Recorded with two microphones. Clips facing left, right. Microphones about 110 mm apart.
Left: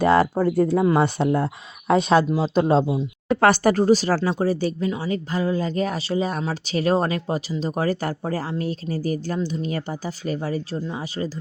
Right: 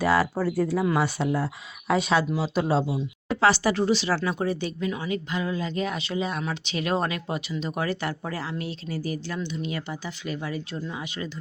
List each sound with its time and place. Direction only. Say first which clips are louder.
0.0 s speech: left 5 dB; 45° left (ahead or behind)
0.8 s speech: left 5 dB; 30° left (ahead or behind)
1.9 s speech: left 5 dB; 45° left (ahead or behind)